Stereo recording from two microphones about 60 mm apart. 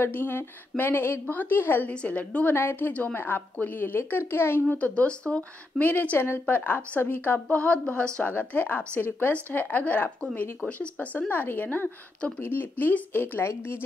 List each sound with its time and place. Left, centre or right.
0.0 s speech: left
1.9 s speech: left
2.5 s speech: left
2.9 s speech: left
4.6 s speech: left
5.9 s speech: left
7.4 s speech: left
8.2 s speech: left
11.2 s speech: left